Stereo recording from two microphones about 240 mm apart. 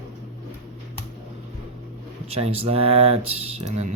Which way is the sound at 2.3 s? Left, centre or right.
Right.